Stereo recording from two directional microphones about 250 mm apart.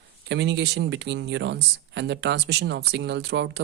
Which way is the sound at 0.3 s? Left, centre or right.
Right.